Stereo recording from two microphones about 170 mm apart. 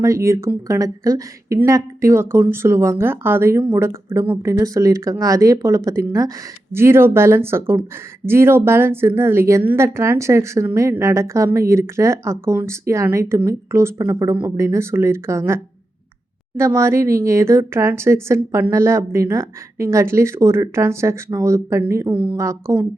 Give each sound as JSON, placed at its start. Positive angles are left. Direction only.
{"t": 0.0, "sound": "speech", "side_deg": -15}